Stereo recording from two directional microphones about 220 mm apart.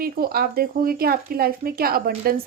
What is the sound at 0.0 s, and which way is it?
Speech, 45° right (ahead or behind).